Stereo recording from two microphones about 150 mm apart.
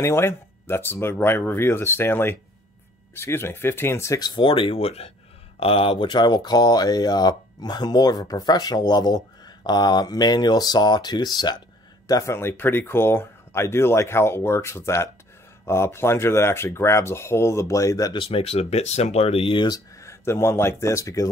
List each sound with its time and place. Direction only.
0.0 s speech: 15° left (ahead or behind)